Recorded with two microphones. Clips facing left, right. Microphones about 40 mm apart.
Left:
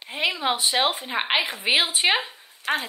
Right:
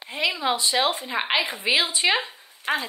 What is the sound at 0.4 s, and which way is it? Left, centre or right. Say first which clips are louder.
Speech: even; centre.